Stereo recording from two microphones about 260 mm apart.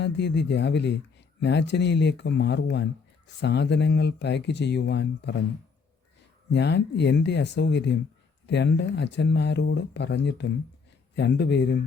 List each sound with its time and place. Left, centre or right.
0.0 s speech: left
6.5 s speech: left